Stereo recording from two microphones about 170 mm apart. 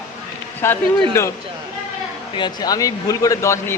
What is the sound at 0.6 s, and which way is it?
Speech, 15° left (ahead or behind).